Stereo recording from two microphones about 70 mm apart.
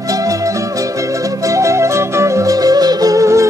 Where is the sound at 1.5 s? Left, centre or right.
Right.